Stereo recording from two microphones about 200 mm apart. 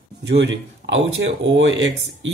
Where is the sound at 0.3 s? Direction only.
65° right (ahead or behind).